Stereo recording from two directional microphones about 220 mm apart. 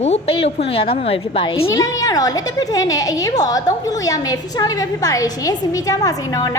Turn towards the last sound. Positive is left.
turn(degrees=15)  # may be behind; listen again after turning